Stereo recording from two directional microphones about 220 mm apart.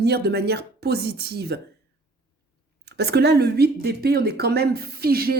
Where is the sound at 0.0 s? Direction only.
45° right (ahead or behind).